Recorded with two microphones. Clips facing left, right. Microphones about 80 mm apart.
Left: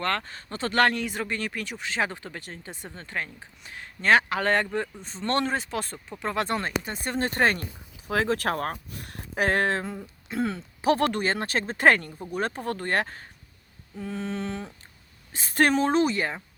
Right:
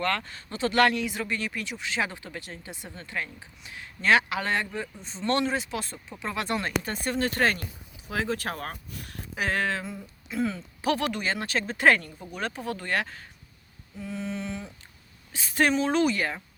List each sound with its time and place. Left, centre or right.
0.0 s speech: left
8.0 s speech: left
10.8 s a sound: left
11.0 s speech: left
15.9 s speech: left